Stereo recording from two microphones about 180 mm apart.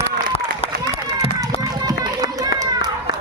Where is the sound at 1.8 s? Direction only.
20° right (ahead or behind).